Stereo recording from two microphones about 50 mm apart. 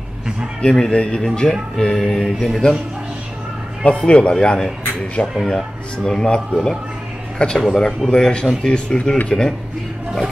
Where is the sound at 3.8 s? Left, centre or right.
Left.